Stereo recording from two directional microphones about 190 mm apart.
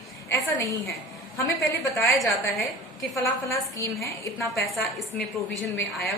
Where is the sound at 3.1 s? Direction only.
15° left (ahead or behind).